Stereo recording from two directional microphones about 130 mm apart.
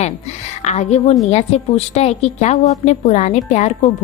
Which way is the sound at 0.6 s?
60° left (ahead or behind).